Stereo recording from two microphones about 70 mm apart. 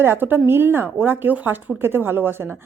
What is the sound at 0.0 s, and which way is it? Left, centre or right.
Speech, right.